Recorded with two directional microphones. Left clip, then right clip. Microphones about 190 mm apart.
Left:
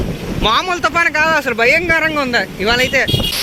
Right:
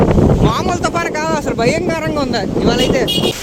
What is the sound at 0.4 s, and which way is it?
Speech, 20° right (ahead or behind).